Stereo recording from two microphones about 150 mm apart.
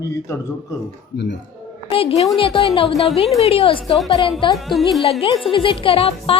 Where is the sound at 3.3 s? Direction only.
45° left (ahead or behind).